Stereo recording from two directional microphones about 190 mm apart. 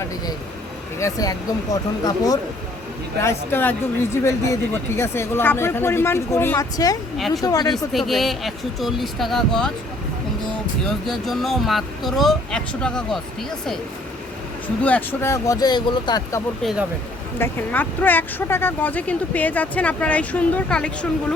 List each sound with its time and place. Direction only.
0.9 s speech: 15° left (ahead or behind)
7.2 s speech: centre (ahead or behind)
7.4 s speech: 20° left (ahead or behind)
7.9 s speech: centre (ahead or behind)
10.8 s speech: centre (ahead or behind)
14.8 s speech: 10° left (ahead or behind)
17.3 s speech: 10° left (ahead or behind)